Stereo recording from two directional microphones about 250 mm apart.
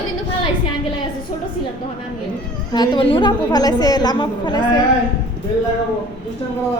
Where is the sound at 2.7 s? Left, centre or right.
Centre.